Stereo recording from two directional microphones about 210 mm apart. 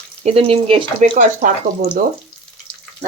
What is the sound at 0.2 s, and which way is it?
Speech, 30° right (ahead or behind).